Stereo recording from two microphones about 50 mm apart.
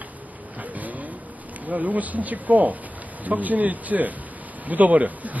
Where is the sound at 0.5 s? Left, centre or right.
Right.